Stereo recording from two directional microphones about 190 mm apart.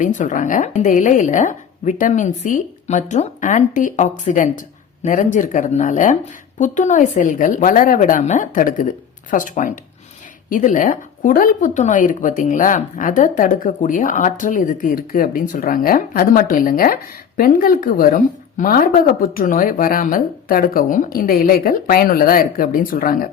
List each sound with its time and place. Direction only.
0.0 s a woman's voice: 40° left (ahead or behind)